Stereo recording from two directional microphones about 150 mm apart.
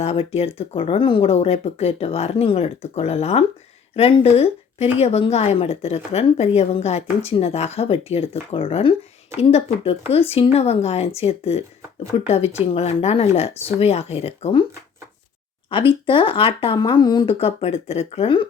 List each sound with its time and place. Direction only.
0.0 s a woman's voice: 45° left (ahead or behind)
15.7 s speech: 35° left (ahead or behind)